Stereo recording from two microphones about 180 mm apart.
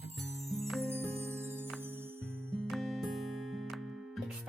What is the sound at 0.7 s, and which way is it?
Music, 5° left (ahead or behind).